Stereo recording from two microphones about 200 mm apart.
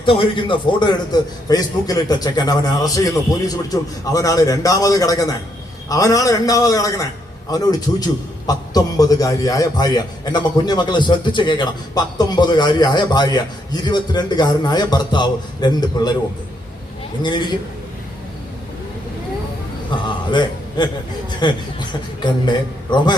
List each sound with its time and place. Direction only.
0.0 s a man's voice: 25° left (ahead or behind)
17.2 s a man's voice: 20° left (ahead or behind)
19.9 s a man's voice: 20° left (ahead or behind)